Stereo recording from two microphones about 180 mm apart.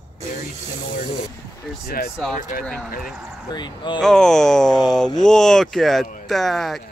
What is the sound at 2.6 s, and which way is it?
Speech, 5° left (ahead or behind).